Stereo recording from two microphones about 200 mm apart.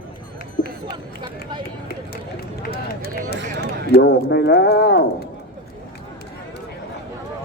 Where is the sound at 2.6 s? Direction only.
50° left (ahead or behind).